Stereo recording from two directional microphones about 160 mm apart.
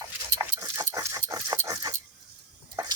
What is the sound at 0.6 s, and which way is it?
Dog, 20° right (ahead or behind).